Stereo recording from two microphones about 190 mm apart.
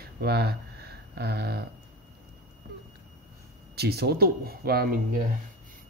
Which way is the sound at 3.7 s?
55° right (ahead or behind).